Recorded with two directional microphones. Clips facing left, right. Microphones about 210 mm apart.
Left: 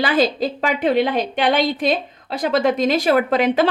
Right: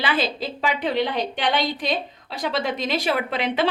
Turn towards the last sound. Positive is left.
turn(degrees=45)  # may be behind; listen again after turning